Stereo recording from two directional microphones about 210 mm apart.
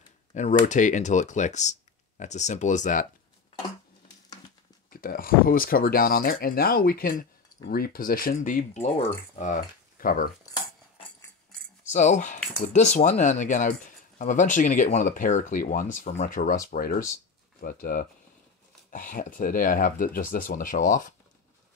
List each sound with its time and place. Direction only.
0.3 s speech: 35° left (ahead or behind)
4.9 s speech: 40° left (ahead or behind)
11.9 s speech: 35° left (ahead or behind)